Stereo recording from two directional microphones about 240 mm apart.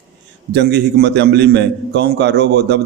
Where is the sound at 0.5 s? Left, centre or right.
Right.